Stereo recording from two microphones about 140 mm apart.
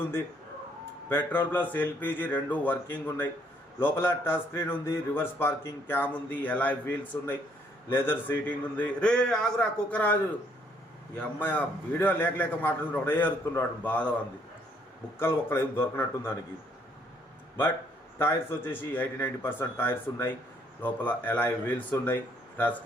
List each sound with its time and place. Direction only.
1.1 s a man's voice: 15° left (ahead or behind)
11.2 s a man's voice: 10° left (ahead or behind)
15.2 s a man's voice: 15° left (ahead or behind)
18.2 s a man's voice: 15° left (ahead or behind)